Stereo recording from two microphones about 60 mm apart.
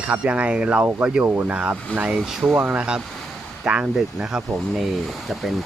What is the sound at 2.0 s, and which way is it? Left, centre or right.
Mantra, centre.